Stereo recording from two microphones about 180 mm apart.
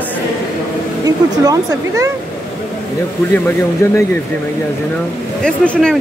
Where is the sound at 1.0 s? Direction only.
20° right (ahead or behind).